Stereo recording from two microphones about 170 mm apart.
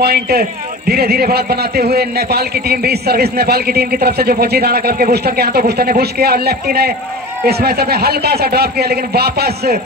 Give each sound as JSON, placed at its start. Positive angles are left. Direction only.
{"t": 0.0, "sound": "a man's voice", "side_deg": -65}